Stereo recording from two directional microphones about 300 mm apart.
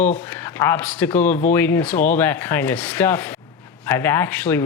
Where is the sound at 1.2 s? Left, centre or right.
Left.